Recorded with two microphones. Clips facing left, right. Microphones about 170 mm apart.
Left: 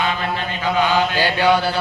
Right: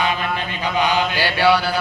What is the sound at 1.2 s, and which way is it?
Mantra, 15° left (ahead or behind).